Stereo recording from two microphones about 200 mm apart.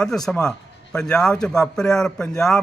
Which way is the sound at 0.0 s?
5° left (ahead or behind).